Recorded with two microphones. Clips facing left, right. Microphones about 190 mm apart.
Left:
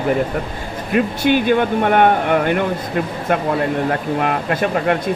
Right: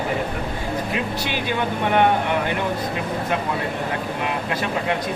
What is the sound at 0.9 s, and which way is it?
Speech, 50° left (ahead or behind).